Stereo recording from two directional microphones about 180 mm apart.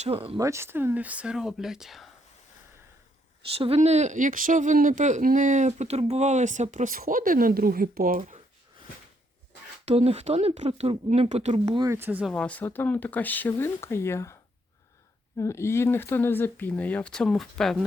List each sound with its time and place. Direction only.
0.0 s speech: 30° right (ahead or behind)
0.3 s speech: 15° right (ahead or behind)
3.5 s speech: 35° right (ahead or behind); by 8.4 s 50° right (ahead or behind)
9.8 s speech: 35° right (ahead or behind)
11.9 s speech: 10° right (ahead or behind)
12.3 s speech: 5° left (ahead or behind)
15.4 s speech: 15° left (ahead or behind)